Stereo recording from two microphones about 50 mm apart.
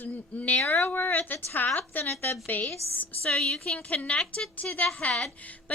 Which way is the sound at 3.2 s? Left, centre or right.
Centre.